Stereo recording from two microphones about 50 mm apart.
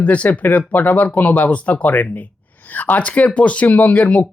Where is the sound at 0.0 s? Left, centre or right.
Left.